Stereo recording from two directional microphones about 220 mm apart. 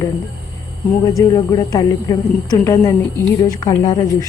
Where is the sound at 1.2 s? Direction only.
15° left (ahead or behind).